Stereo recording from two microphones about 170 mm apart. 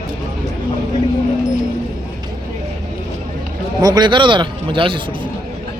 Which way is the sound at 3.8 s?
25° right (ahead or behind).